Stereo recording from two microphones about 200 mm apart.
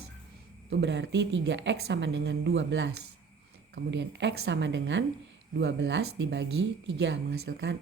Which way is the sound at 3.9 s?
65° right (ahead or behind).